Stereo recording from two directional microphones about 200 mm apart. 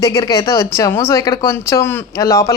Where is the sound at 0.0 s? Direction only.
15° left (ahead or behind).